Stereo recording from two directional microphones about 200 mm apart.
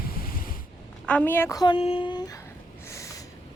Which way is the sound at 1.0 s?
5° left (ahead or behind).